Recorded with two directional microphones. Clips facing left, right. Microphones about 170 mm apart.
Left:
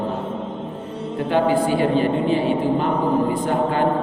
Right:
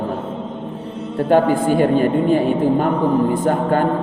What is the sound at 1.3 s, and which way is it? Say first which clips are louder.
A man's voice: right 4 dB; 50° right (ahead or behind).